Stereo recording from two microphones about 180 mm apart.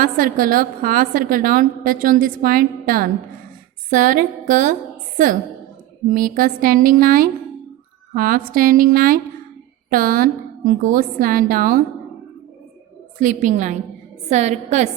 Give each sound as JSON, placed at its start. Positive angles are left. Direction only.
{"t": 0.0, "sound": "a woman's voice", "side_deg": -50}
{"t": 13.1, "sound": "a woman's voice", "side_deg": -45}